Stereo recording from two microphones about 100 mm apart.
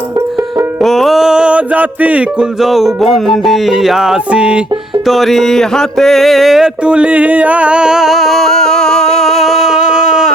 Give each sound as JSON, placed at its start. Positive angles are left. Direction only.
{"t": 0.8, "sound": "music", "side_deg": 0}
{"t": 2.6, "sound": "music", "side_deg": 0}
{"t": 5.0, "sound": "music", "side_deg": 0}